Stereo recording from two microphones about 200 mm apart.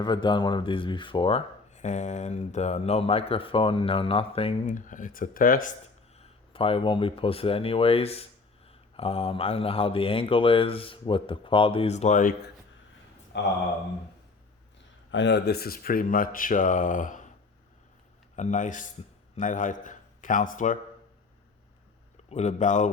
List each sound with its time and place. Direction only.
0.0 s speech: 25° left (ahead or behind); by 5.7 s 45° left (ahead or behind)
6.1 s speech: 30° left (ahead or behind)
13.3 s speech: 60° left (ahead or behind)
15.1 s speech: 60° left (ahead or behind); by 17.2 s 40° left (ahead or behind)
18.3 s a man's voice: 40° left (ahead or behind)
22.3 s a man's voice: 35° left (ahead or behind)